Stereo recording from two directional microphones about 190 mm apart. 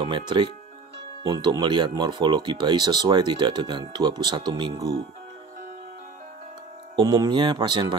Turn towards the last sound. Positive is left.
turn(degrees=-25)  # may be behind; listen again after turning